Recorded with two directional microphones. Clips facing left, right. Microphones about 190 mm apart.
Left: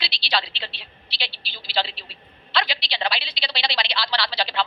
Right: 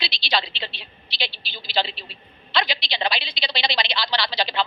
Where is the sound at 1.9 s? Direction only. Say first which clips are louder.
Right 4 dB; 45° right (ahead or behind).